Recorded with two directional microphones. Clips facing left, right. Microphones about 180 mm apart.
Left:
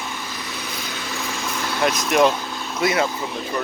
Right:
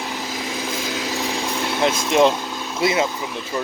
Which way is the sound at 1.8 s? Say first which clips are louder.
Right 1 dB; 25° right (ahead or behind).